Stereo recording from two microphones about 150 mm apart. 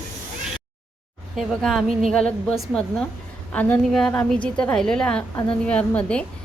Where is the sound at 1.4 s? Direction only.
Centre (ahead or behind).